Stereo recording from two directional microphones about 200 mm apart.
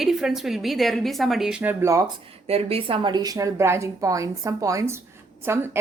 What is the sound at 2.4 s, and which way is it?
A woman's voice, 30° right (ahead or behind).